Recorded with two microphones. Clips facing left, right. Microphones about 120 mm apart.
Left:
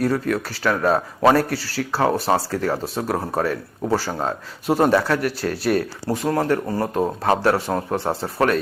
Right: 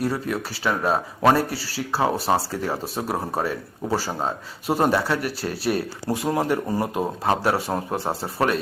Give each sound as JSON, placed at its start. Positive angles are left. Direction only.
{"t": 0.1, "sound": "speech", "side_deg": -10}
{"t": 5.5, "sound": "speech", "side_deg": 50}
{"t": 6.1, "sound": "speech", "side_deg": -10}